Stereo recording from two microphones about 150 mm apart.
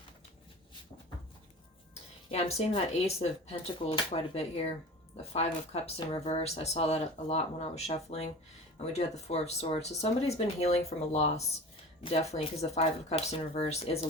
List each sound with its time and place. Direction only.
2.3 s speech: 45° left (ahead or behind)